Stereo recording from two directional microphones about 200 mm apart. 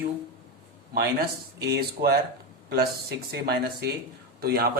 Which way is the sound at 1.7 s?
50° right (ahead or behind).